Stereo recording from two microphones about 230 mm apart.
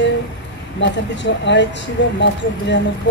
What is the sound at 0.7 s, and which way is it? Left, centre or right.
A woman's voice, left.